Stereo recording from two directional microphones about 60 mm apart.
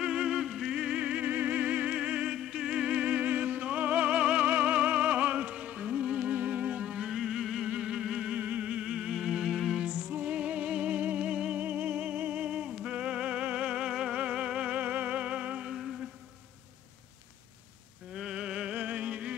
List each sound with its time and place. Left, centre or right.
0.0 s music: centre
2.3 s music: centre
9.1 s music: centre
9.8 s music: right
11.6 s music: right
15.7 s music: centre
18.1 s music: centre